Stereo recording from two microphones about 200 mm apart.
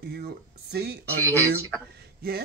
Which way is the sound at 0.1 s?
55° right (ahead or behind).